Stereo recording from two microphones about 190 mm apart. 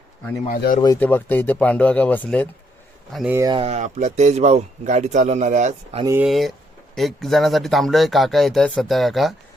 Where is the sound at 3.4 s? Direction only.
25° right (ahead or behind); by 6.0 s 40° right (ahead or behind).